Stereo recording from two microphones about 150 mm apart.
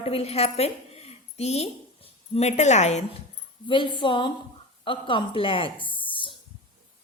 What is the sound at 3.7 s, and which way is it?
A woman's voice, 35° left (ahead or behind).